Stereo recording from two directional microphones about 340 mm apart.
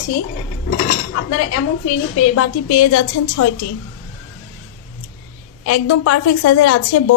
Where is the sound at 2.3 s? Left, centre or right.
Left.